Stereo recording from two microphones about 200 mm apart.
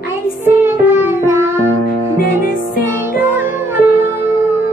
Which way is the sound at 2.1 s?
45° left (ahead or behind).